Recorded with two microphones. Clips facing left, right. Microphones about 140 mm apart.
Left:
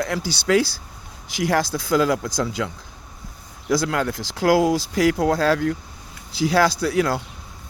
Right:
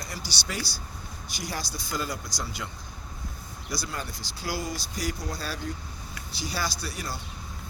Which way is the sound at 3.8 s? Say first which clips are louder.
Left 13 dB; 90° left.